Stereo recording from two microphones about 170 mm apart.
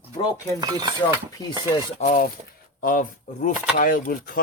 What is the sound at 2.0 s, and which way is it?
A man's voice, 55° left (ahead or behind).